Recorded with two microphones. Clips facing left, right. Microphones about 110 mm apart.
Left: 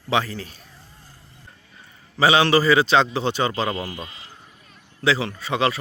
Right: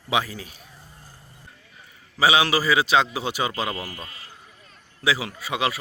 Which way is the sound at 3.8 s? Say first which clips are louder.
Left 4 dB; 25° left (ahead or behind).